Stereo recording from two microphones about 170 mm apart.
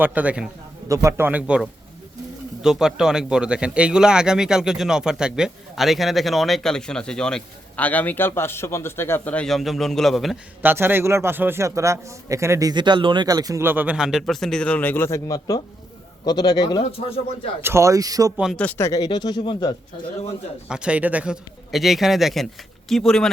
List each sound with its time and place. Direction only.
0.0 s a man's voice: 10° right (ahead or behind)
10.6 s a man's voice: 10° right (ahead or behind); by 17.5 s 30° left (ahead or behind)
17.6 s speech: 15° right (ahead or behind)
18.5 s speech: 10° left (ahead or behind); by 19.7 s 25° left (ahead or behind)
20.7 s speech: 5° right (ahead or behind)